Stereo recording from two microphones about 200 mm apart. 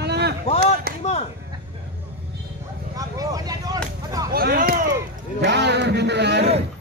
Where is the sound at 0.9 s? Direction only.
55° right (ahead or behind).